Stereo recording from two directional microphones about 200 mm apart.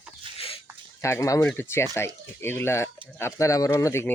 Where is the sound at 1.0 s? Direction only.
15° left (ahead or behind).